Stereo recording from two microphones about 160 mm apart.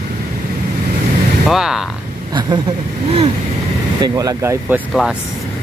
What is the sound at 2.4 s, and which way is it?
Speech, 30° right (ahead or behind).